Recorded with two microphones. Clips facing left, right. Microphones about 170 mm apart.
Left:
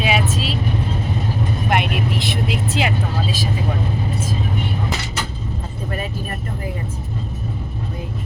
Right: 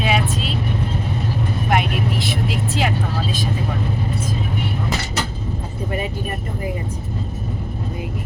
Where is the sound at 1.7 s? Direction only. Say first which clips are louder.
Right 1 dB; centre (ahead or behind).